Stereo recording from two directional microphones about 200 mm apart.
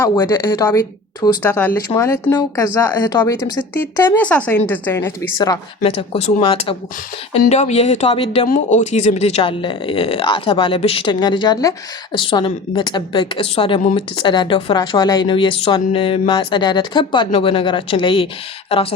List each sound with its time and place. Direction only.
0.0 s speech: 20° left (ahead or behind)
5.8 s speech: 30° left (ahead or behind)
8.4 s speech: 40° left (ahead or behind)